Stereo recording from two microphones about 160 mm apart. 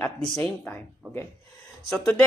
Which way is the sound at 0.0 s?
5° left (ahead or behind).